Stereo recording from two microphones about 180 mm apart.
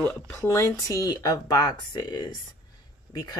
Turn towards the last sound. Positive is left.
turn(degrees=20)  # may be behind; listen again after turning